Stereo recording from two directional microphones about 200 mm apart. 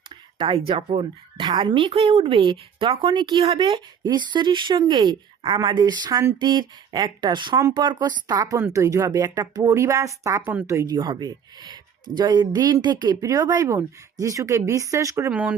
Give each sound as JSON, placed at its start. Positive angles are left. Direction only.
{"t": 0.1, "sound": "speech", "side_deg": -25}